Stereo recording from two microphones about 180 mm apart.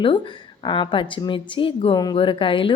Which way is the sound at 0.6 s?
25° left (ahead or behind).